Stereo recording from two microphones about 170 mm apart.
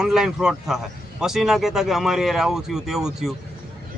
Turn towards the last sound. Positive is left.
turn(degrees=0)  # may be behind; listen again after turning